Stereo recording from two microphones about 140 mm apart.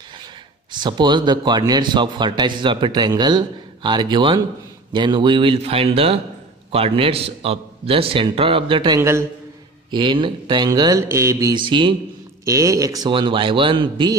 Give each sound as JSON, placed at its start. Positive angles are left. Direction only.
{"t": 0.7, "sound": "a man's voice", "side_deg": -35}
{"t": 11.5, "sound": "a man's voice", "side_deg": -35}
{"t": 12.4, "sound": "a man's voice", "side_deg": -25}